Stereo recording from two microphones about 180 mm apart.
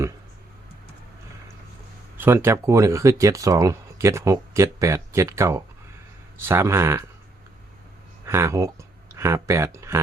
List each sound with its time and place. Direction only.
2.1 s speech: 10° right (ahead or behind)
8.2 s speech: 15° right (ahead or behind)